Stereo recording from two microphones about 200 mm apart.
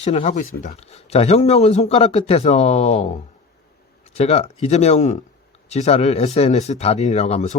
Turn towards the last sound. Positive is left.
turn(degrees=35)  # may be behind; listen again after turning